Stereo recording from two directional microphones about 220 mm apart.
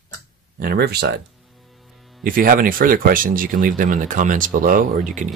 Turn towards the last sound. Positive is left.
turn(degrees=-35)  # may be behind; listen again after turning